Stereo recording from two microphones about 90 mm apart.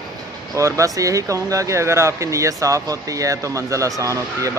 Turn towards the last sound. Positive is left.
turn(degrees=-35)  # may be behind; listen again after turning